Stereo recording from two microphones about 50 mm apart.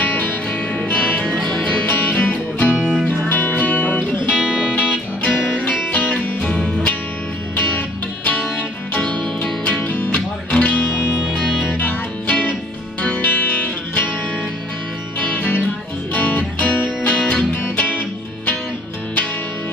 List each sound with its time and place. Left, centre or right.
0.2 s music: left
4.4 s music: centre
5.2 s music: left
6.4 s music: left
8.9 s music: left
9.8 s music: left
15.3 s music: left